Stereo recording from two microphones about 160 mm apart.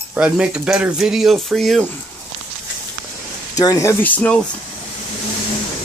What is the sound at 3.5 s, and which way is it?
Speech, 20° left (ahead or behind).